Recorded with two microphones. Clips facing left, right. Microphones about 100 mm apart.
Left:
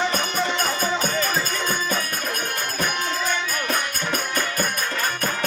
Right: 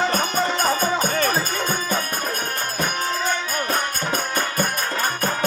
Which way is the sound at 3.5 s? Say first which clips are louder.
Right 2 dB; 35° right (ahead or behind).